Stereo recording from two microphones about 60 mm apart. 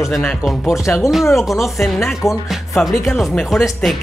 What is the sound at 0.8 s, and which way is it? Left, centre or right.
Speech, left.